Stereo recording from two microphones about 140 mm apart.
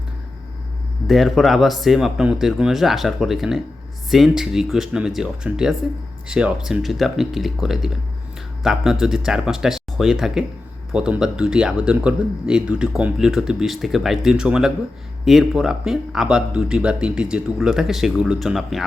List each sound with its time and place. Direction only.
1.0 s speech: centre (ahead or behind)